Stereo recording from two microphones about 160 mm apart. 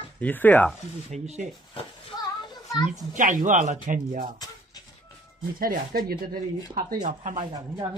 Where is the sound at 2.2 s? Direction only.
20° left (ahead or behind).